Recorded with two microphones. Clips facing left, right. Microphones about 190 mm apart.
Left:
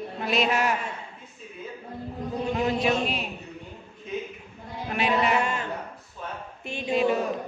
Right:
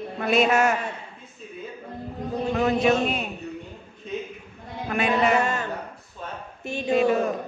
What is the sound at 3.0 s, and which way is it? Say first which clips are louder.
Speech: right 3 dB; 45° right (ahead or behind).